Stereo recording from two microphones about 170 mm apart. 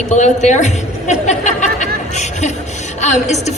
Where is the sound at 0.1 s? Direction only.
45° left (ahead or behind).